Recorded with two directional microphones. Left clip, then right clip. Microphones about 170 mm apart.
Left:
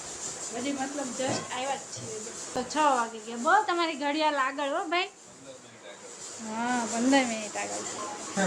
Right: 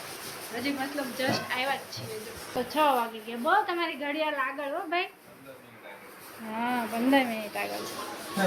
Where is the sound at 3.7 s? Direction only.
30° left (ahead or behind).